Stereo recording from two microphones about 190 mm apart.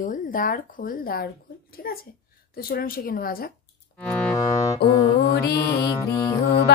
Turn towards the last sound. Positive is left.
turn(degrees=15)  # may be behind; listen again after turning